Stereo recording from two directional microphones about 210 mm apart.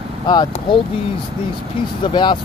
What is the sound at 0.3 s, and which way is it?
Speech, 20° left (ahead or behind).